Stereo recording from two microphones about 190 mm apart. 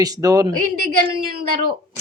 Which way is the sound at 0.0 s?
20° right (ahead or behind).